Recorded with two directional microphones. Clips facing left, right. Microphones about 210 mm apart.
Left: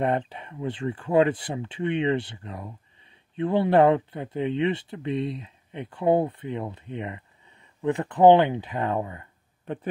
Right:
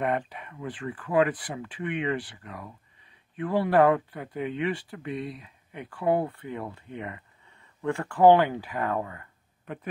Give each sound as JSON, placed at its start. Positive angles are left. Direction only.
{"t": 0.0, "sound": "speech", "side_deg": 25}